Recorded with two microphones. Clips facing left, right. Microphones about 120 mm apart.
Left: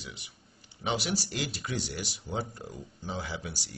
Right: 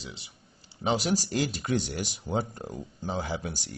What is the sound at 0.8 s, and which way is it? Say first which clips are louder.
Speech: right 5 dB; 40° right (ahead or behind).